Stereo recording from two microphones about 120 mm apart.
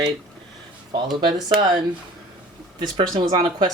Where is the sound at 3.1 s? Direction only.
35° right (ahead or behind).